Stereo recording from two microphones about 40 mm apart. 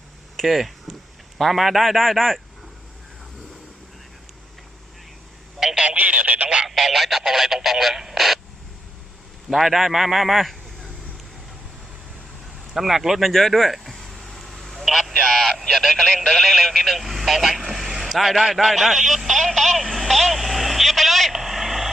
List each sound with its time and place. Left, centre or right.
0.4 s speech: centre
5.6 s telephone: centre
6.0 s a sound: right
6.7 s radio: centre
9.5 s speech: centre
12.7 s speech: centre
13.3 s a sound: centre
15.6 s speech: centre
17.7 s vehicle: centre